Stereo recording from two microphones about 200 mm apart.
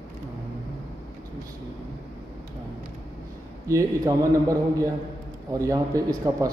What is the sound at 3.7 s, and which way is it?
A man's voice, 15° right (ahead or behind).